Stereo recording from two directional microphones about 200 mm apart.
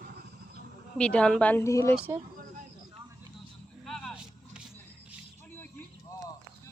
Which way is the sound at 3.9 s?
Centre (ahead or behind).